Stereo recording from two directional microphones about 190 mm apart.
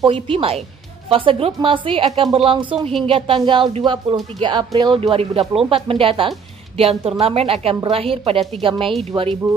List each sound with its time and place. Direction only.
0.0 s a woman's voice: 30° right (ahead or behind)